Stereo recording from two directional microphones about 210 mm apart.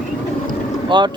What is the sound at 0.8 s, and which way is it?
Speech, 20° right (ahead or behind).